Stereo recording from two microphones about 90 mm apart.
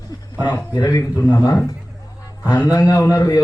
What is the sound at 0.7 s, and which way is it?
Speech, 50° left (ahead or behind).